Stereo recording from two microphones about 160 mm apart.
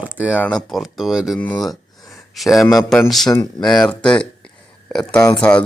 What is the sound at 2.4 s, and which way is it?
Speech, centre (ahead or behind).